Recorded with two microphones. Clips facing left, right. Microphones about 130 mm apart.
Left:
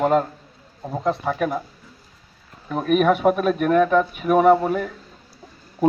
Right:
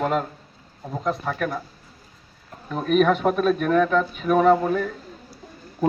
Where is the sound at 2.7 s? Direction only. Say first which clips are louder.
Left 1 dB; 10° left (ahead or behind).